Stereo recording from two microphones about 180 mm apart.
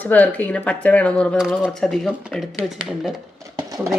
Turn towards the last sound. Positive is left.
turn(degrees=-20)  # may be behind; listen again after turning